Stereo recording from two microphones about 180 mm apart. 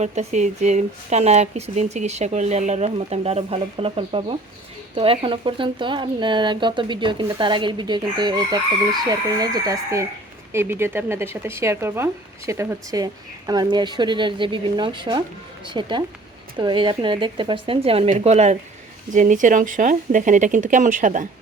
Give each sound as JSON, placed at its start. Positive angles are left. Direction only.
{"t": 0.0, "sound": "speech", "side_deg": -40}
{"t": 4.9, "sound": "chicken", "side_deg": -30}
{"t": 10.5, "sound": "speech", "side_deg": -15}
{"t": 13.5, "sound": "chicken", "side_deg": -25}
{"t": 18.2, "sound": "speech", "side_deg": -35}